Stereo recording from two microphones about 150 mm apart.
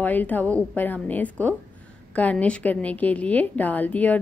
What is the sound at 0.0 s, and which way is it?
A woman's voice, 10° left (ahead or behind).